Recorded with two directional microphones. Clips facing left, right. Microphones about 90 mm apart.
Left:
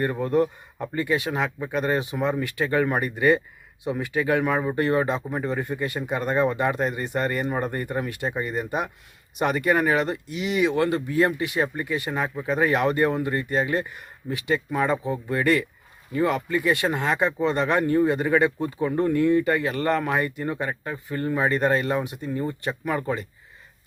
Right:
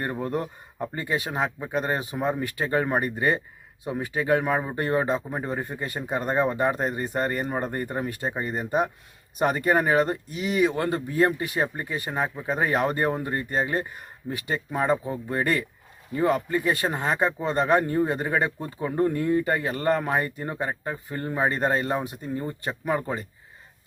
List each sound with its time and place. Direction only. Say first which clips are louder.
0.0 s speech: left 6 dB; 30° right (ahead or behind)